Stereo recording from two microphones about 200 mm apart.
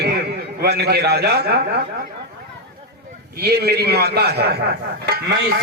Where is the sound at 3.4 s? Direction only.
55° right (ahead or behind).